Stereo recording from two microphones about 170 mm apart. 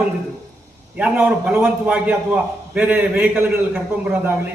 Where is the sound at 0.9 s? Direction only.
10° right (ahead or behind).